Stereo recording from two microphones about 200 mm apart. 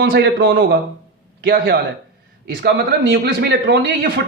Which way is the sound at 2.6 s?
55° right (ahead or behind).